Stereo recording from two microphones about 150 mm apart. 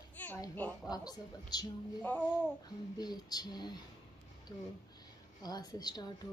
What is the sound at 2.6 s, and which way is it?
A woman's voice, 25° left (ahead or behind).